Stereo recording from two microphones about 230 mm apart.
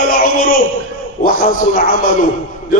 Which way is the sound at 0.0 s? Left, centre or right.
Left.